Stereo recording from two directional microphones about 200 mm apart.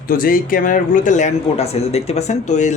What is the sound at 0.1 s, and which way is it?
Speech, 45° left (ahead or behind).